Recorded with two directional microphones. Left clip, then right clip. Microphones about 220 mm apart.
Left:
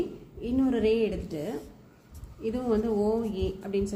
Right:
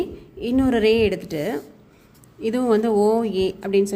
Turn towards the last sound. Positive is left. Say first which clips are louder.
# right 10 dB
turn(degrees=-40)  # may be behind; listen again after turning